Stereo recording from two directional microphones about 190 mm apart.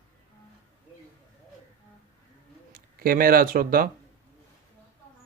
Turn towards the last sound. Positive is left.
turn(degrees=-50)  # may be behind; listen again after turning